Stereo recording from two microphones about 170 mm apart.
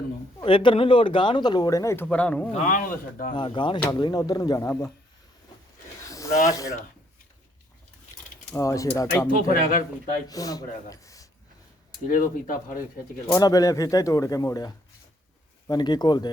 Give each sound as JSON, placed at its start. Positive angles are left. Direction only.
{"t": 0.3, "sound": "speech", "side_deg": 30}
{"t": 2.6, "sound": "speech", "side_deg": 55}
{"t": 3.3, "sound": "speech", "side_deg": 30}
{"t": 6.0, "sound": "snake", "side_deg": 20}
{"t": 8.5, "sound": "speech", "side_deg": 20}
{"t": 9.5, "sound": "speech", "side_deg": 55}
{"t": 10.2, "sound": "speech", "side_deg": 20}
{"t": 10.8, "sound": "a sound", "side_deg": 20}
{"t": 12.0, "sound": "speech", "side_deg": 55}
{"t": 13.2, "sound": "speech", "side_deg": 20}